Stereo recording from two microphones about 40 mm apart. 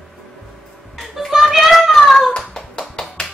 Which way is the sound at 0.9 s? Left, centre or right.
Centre.